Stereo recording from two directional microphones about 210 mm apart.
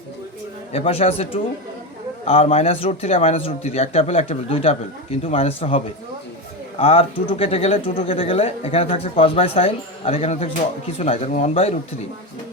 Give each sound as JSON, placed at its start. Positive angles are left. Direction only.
{"t": 0.7, "sound": "speech", "side_deg": 30}